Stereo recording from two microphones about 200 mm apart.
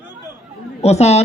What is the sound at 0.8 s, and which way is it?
Speech, 35° left (ahead or behind).